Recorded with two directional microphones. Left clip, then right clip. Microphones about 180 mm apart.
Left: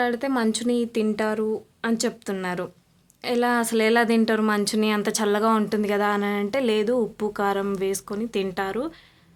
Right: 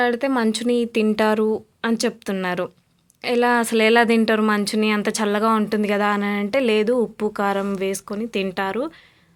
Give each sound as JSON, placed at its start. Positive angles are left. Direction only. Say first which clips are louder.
{"t": 0.0, "sound": "speech", "louder": "right 4 dB", "side_deg": -25}